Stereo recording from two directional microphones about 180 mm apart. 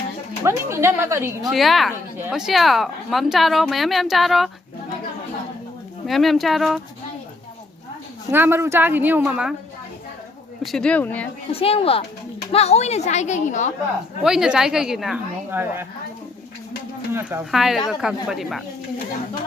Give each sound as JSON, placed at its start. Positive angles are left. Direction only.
{"t": 0.4, "sound": "a woman's voice", "side_deg": -15}
{"t": 1.5, "sound": "speech", "side_deg": 0}
{"t": 6.1, "sound": "speech", "side_deg": 0}
{"t": 8.3, "sound": "a woman's voice", "side_deg": -10}
{"t": 10.6, "sound": "speech", "side_deg": 0}
{"t": 11.5, "sound": "speech", "side_deg": 30}
{"t": 14.3, "sound": "a woman's voice", "side_deg": -5}
{"t": 17.2, "sound": "a woman's voice", "side_deg": -15}
{"t": 17.5, "sound": "speech", "side_deg": 0}